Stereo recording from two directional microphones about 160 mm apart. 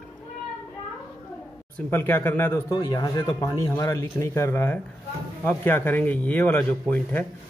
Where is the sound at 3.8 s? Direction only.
15° left (ahead or behind).